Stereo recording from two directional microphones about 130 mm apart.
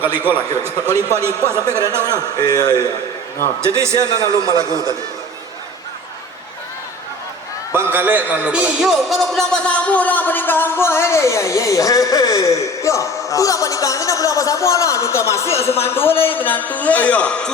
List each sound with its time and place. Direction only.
0.0 s a man's voice: 15° right (ahead or behind)
2.0 s a man's voice: 30° left (ahead or behind)
3.6 s a man's voice: 20° right (ahead or behind)
3.9 s a man's voice: 30° left (ahead or behind)
7.7 s a man's voice: 15° right (ahead or behind); by 17.5 s 10° left (ahead or behind)